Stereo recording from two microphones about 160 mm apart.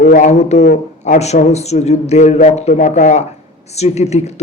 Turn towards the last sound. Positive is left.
turn(degrees=40)  # may be behind; listen again after turning